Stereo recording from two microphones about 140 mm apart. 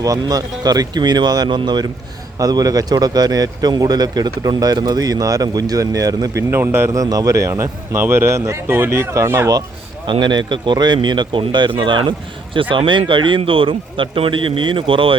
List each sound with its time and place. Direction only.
0.0 s a man's voice: 25° right (ahead or behind)
6.5 s a man's voice: 15° right (ahead or behind)
10.1 s a man's voice: 30° right (ahead or behind)